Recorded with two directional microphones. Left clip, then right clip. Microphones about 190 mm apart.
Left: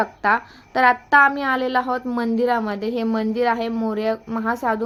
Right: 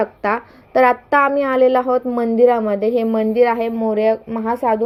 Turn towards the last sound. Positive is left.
turn(degrees=0)  # may be behind; listen again after turning